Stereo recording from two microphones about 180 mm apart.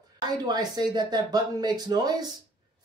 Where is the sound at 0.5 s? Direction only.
20° right (ahead or behind).